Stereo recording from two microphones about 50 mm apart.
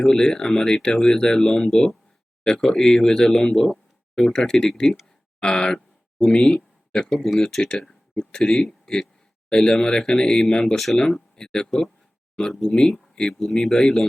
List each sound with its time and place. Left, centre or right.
0.0 s a man's voice: centre
5.4 s a sound: centre
7.1 s speech: centre
7.3 s speech: centre